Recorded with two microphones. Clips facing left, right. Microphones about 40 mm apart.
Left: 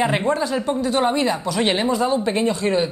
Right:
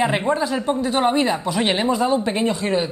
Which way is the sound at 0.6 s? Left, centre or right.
Centre.